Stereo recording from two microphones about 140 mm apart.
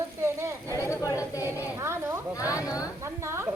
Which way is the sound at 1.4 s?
20° right (ahead or behind).